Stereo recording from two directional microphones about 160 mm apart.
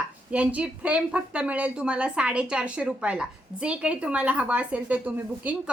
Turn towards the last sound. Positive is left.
turn(degrees=-10)  # may be behind; listen again after turning